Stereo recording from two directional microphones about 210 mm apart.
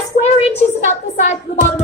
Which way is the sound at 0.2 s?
30° left (ahead or behind).